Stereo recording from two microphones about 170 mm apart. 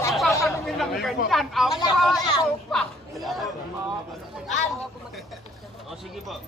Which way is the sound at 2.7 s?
Centre (ahead or behind).